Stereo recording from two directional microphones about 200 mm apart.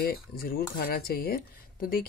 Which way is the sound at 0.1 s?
50° left (ahead or behind).